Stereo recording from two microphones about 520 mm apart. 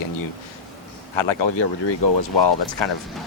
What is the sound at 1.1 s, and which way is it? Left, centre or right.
Speech, left.